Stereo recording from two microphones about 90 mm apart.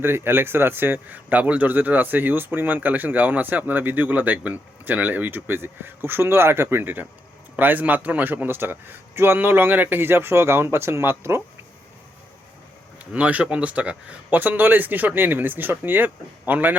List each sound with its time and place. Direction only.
0.0 s a man's voice: 25° right (ahead or behind)
13.1 s a man's voice: 15° right (ahead or behind)